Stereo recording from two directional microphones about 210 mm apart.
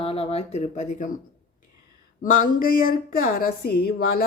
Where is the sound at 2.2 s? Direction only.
40° left (ahead or behind).